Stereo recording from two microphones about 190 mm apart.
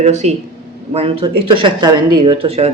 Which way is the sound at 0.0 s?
35° right (ahead or behind).